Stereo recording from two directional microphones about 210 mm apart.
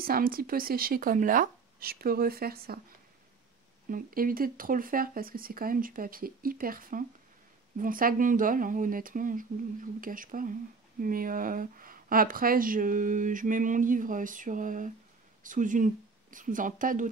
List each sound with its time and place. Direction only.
0.0 s speech: 45° right (ahead or behind)
3.9 s speech: 45° right (ahead or behind)